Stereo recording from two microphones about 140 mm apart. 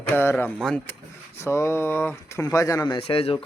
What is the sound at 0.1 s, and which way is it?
Speech, 15° left (ahead or behind).